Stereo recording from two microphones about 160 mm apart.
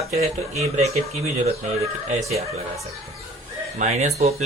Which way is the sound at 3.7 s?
50° right (ahead or behind).